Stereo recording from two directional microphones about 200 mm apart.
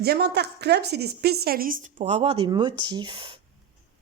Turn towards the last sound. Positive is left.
turn(degrees=-25)  # may be behind; listen again after turning